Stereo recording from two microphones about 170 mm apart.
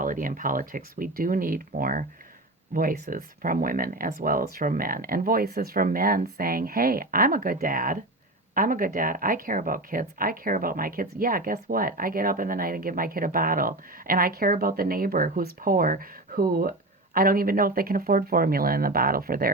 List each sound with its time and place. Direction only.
0.0 s speech: 55° right (ahead or behind)